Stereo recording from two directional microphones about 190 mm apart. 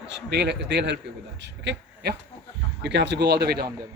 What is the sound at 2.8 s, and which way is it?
Speech, 65° right (ahead or behind).